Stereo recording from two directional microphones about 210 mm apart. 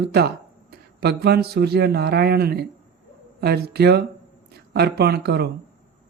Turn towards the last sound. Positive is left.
turn(degrees=-50)  # may be behind; listen again after turning